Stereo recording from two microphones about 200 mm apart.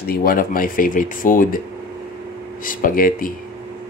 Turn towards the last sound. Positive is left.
turn(degrees=45)  # may be behind; listen again after turning